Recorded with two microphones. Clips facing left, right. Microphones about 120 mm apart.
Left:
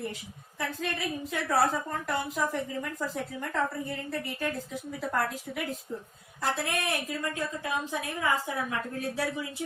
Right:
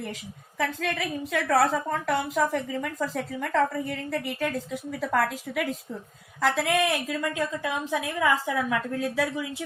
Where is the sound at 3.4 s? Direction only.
90° right.